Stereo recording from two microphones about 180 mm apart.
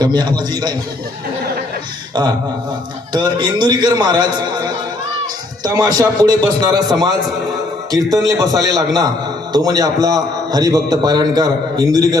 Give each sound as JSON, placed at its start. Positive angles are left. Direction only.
{"t": 0.0, "sound": "a man's voice", "side_deg": -25}
{"t": 3.1, "sound": "a man's voice", "side_deg": -25}
{"t": 7.9, "sound": "a man's voice", "side_deg": -20}